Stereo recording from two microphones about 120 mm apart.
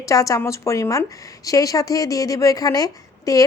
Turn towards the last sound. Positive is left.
turn(degrees=30)  # may be behind; listen again after turning